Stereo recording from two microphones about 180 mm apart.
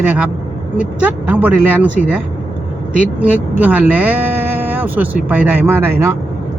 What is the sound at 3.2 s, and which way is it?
Speech, 10° right (ahead or behind).